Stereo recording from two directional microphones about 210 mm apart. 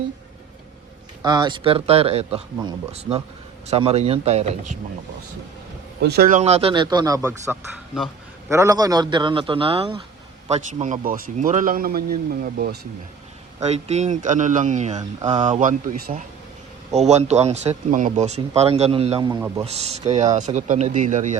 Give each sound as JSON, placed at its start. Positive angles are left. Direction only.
{"t": 1.2, "sound": "speech", "side_deg": -20}
{"t": 6.0, "sound": "speech", "side_deg": -50}
{"t": 13.6, "sound": "speech", "side_deg": -30}
{"t": 16.9, "sound": "speech", "side_deg": -30}
{"t": 19.6, "sound": "speech", "side_deg": -30}